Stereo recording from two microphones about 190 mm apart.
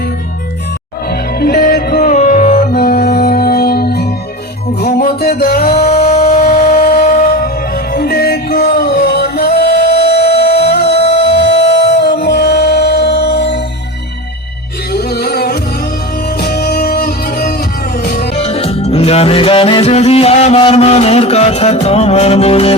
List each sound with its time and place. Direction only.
1.5 s music: 50° left (ahead or behind)
14.9 s music: 55° left (ahead or behind)
18.3 s music: 30° left (ahead or behind)